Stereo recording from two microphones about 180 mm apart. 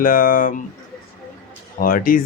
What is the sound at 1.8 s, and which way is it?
Speech, 50° left (ahead or behind).